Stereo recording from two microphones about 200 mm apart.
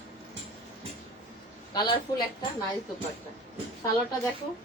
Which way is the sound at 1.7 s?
20° left (ahead or behind).